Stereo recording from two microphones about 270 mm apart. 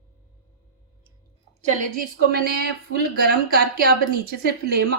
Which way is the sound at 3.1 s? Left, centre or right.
Right.